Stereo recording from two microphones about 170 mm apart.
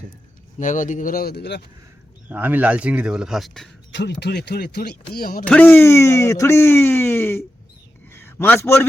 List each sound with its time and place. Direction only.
0.6 s speech: 50° left (ahead or behind); by 1.6 s 80° left
2.3 s speech: 10° right (ahead or behind)
3.9 s speech: 85° left; by 5.5 s 60° left (ahead or behind)
5.5 s a man's voice: 10° left (ahead or behind)